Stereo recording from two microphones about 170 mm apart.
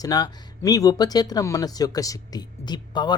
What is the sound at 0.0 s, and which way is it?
Speech, 25° left (ahead or behind).